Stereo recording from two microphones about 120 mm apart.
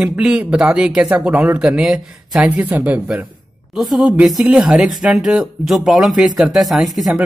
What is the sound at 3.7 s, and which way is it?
Speech, centre (ahead or behind).